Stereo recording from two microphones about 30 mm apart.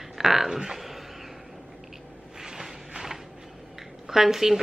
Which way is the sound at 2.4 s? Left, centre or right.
Centre.